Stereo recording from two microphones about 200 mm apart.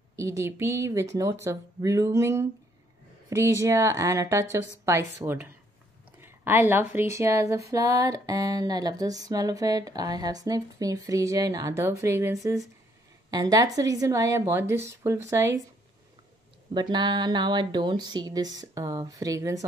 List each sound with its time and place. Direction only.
0.1 s speech: 15° right (ahead or behind)
16.7 s speech: 20° right (ahead or behind)